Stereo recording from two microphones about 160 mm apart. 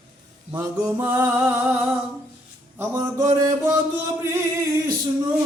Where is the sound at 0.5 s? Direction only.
10° right (ahead or behind).